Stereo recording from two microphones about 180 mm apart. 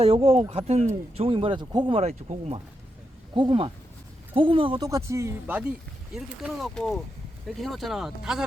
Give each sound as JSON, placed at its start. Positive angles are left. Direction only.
{"t": 0.0, "sound": "speech", "side_deg": -30}